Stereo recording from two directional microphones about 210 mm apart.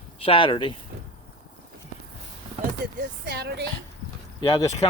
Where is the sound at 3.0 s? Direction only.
50° right (ahead or behind).